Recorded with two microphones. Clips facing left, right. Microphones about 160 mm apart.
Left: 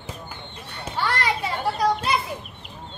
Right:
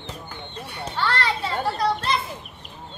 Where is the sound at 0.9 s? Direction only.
10° left (ahead or behind).